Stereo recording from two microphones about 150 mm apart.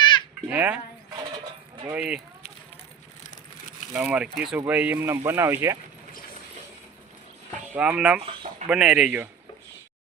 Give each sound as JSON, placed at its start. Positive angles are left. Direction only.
{"t": 0.4, "sound": "speech", "side_deg": -10}
{"t": 1.9, "sound": "speech", "side_deg": -5}
{"t": 3.2, "sound": "a sound", "side_deg": 55}
{"t": 3.9, "sound": "speech", "side_deg": -5}
{"t": 7.8, "sound": "speech", "side_deg": -5}